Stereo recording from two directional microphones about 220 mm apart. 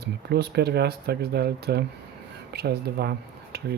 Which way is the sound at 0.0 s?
50° right (ahead or behind).